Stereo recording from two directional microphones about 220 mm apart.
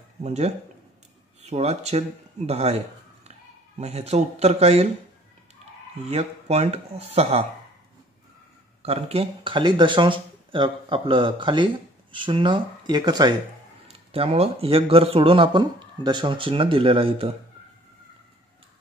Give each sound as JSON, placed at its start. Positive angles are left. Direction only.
{"t": 0.2, "sound": "speech", "side_deg": -30}
{"t": 6.0, "sound": "speech", "side_deg": -30}
{"t": 8.8, "sound": "speech", "side_deg": -25}